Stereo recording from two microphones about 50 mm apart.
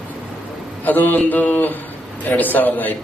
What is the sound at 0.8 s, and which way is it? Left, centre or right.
Speech, left.